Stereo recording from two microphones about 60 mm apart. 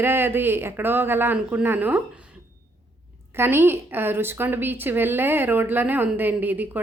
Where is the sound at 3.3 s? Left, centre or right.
Right.